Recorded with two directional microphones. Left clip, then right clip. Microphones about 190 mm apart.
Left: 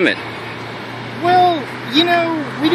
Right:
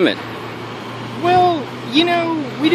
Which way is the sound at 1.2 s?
5° left (ahead or behind).